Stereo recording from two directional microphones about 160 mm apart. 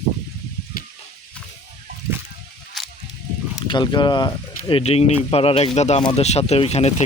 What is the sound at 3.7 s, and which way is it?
Speech, 30° left (ahead or behind).